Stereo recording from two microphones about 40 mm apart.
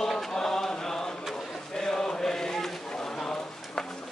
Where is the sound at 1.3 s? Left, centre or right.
Centre.